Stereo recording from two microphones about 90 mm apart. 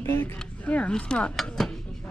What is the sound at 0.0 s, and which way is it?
Speech, 25° left (ahead or behind).